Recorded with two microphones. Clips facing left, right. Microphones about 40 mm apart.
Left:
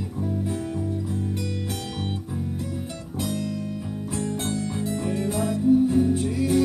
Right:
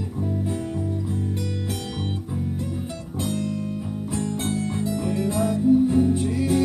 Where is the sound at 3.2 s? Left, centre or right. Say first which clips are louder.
Right 2 dB; right.